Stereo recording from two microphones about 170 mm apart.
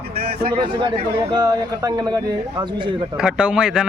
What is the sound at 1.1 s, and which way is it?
A man's voice, 25° right (ahead or behind).